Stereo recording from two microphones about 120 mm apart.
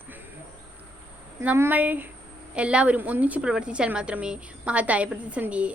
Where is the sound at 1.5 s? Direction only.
15° right (ahead or behind).